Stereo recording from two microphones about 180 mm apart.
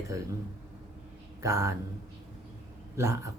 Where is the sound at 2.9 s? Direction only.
15° right (ahead or behind).